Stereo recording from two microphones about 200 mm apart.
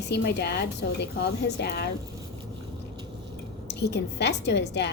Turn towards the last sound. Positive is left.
turn(degrees=55)  # may be behind; listen again after turning